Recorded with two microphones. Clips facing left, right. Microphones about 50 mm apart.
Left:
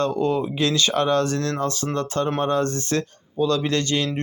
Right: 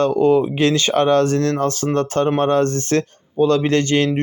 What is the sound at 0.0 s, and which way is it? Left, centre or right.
Speech, right.